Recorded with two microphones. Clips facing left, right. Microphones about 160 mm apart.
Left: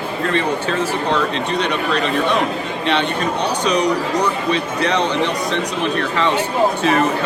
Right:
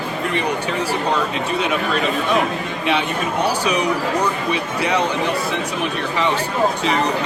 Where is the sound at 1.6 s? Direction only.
5° right (ahead or behind).